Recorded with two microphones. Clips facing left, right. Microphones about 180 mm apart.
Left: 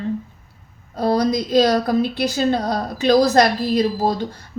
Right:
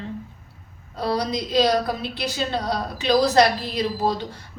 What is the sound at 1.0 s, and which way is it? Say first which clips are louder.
A woman's voice: left 6 dB; 45° left (ahead or behind).